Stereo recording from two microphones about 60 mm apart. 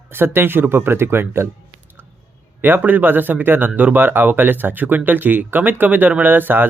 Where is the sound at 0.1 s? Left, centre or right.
Right.